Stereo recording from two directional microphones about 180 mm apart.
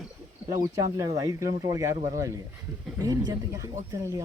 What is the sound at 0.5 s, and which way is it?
Speech, 20° right (ahead or behind).